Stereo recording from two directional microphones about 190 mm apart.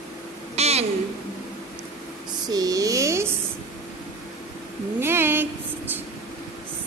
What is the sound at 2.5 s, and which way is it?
Speech, 20° right (ahead or behind).